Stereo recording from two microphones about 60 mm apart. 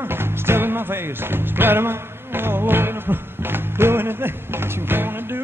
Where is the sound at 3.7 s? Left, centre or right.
Right.